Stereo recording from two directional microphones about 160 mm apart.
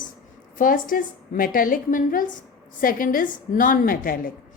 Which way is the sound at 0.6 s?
60° left (ahead or behind).